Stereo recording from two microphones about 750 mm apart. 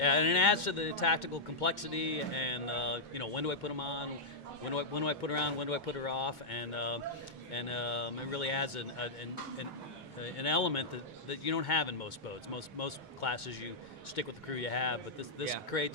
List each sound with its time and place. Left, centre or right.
0.0 s speech: left
10.2 s speech: left